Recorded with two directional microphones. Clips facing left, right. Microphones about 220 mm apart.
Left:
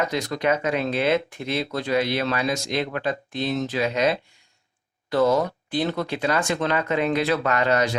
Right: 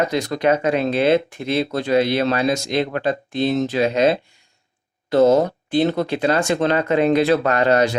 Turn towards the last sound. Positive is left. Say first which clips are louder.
# right 5 dB
turn(degrees=-30)  # may be behind; listen again after turning